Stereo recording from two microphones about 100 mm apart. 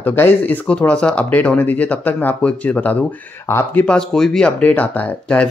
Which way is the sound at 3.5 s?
25° left (ahead or behind).